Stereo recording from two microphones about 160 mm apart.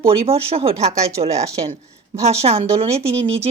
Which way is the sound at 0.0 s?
35° right (ahead or behind).